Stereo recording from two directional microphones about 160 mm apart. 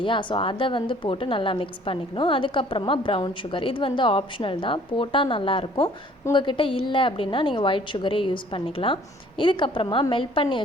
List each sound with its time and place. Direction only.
0.0 s a woman's voice: 30° left (ahead or behind)